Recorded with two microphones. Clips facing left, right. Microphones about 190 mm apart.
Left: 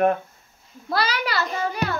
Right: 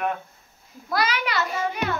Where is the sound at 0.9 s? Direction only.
35° left (ahead or behind).